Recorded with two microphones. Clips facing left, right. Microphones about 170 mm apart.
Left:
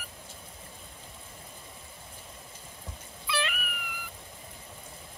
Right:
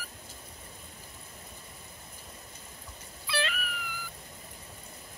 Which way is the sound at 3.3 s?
30° right (ahead or behind).